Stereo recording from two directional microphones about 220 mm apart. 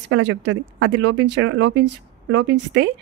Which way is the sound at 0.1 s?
55° right (ahead or behind).